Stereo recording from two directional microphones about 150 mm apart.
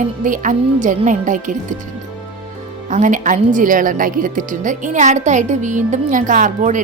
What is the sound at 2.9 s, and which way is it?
A woman's voice, 55° right (ahead or behind).